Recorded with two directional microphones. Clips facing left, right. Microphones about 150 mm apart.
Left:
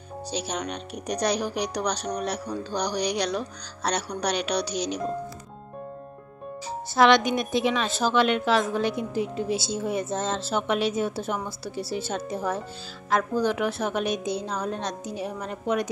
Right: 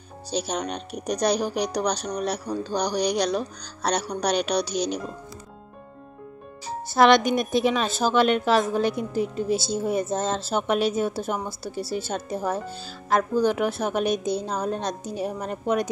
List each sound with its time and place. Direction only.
0.3 s speech: 40° right (ahead or behind)
7.0 s a woman's voice: 45° right (ahead or behind)